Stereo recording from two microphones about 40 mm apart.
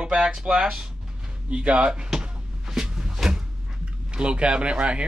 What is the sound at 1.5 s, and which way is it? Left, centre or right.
Speech, right.